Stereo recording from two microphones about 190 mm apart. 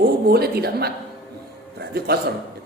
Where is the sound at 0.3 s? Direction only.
55° right (ahead or behind).